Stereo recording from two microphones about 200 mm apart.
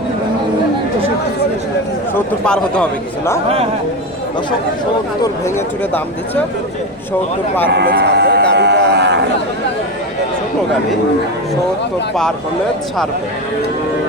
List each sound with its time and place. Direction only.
2.4 s a man's voice: 5° left (ahead or behind)
5.2 s speech: 10° left (ahead or behind)
7.7 s speech: 55° right (ahead or behind)